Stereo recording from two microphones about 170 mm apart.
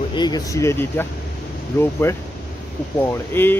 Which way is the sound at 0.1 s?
25° left (ahead or behind).